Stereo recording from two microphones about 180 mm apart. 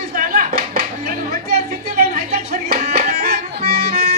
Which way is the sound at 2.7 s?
55° right (ahead or behind).